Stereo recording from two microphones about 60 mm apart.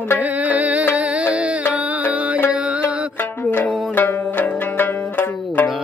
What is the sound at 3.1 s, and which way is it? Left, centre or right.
Music, left.